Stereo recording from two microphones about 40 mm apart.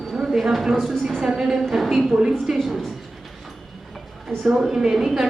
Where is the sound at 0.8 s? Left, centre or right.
Centre.